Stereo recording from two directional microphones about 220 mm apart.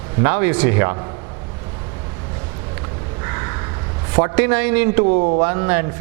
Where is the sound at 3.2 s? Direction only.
15° right (ahead or behind).